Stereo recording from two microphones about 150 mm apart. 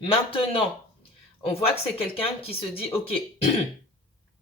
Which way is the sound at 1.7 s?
40° left (ahead or behind).